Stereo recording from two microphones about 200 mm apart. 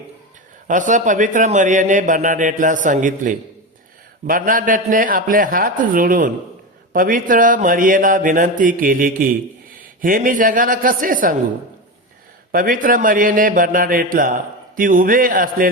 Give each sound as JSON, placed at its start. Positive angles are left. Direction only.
{"t": 0.7, "sound": "a man's voice", "side_deg": -40}
{"t": 12.5, "sound": "speech", "side_deg": -45}